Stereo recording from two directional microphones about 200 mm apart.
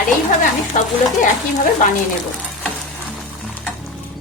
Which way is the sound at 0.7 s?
40° left (ahead or behind).